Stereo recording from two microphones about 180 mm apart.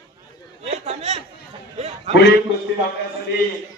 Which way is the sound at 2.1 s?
70° left (ahead or behind).